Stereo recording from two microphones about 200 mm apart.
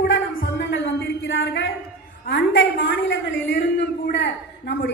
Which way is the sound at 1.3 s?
65° left (ahead or behind).